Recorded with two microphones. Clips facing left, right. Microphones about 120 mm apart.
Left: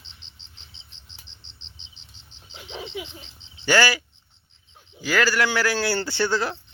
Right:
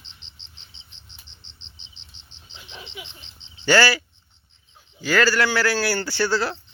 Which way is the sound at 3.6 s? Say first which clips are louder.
Right 2 dB; 15° left (ahead or behind).